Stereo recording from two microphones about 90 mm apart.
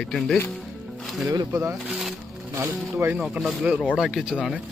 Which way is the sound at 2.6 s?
25° right (ahead or behind).